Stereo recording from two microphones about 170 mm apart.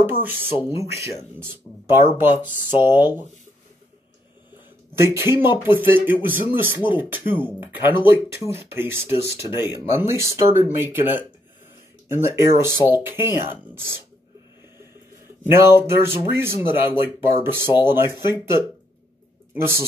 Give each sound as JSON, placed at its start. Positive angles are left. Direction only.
{"t": 0.0, "sound": "speech", "side_deg": -10}
{"t": 5.0, "sound": "speech", "side_deg": -15}
{"t": 15.4, "sound": "speech", "side_deg": -15}